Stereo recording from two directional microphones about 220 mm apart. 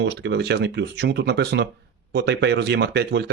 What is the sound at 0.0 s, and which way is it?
Speech, 50° right (ahead or behind).